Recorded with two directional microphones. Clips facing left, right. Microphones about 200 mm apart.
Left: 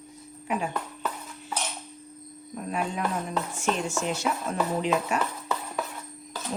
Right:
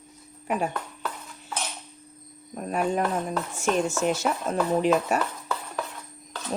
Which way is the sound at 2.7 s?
45° right (ahead or behind).